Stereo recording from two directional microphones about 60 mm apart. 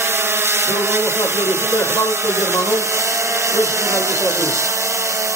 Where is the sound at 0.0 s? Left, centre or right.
Right.